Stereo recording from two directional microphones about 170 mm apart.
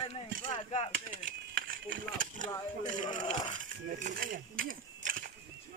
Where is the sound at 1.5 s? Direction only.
60° right (ahead or behind).